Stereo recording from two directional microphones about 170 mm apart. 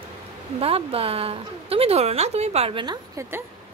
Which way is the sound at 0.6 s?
35° right (ahead or behind).